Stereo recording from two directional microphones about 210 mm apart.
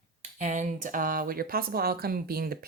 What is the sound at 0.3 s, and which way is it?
Speech, 35° right (ahead or behind).